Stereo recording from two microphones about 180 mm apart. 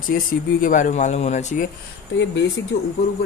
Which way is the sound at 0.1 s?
60° left (ahead or behind).